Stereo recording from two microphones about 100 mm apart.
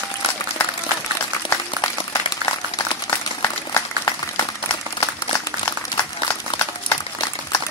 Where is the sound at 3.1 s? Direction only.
30° left (ahead or behind).